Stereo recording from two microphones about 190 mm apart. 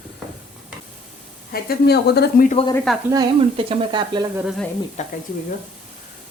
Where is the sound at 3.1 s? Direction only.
25° right (ahead or behind).